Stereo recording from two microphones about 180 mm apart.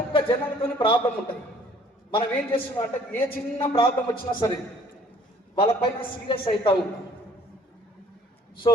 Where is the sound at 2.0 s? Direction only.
25° left (ahead or behind).